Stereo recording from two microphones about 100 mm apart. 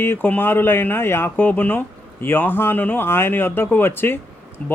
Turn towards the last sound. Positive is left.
turn(degrees=15)  # may be behind; listen again after turning